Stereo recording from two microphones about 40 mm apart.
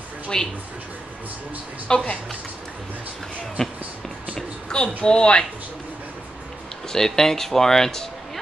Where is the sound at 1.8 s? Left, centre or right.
Left.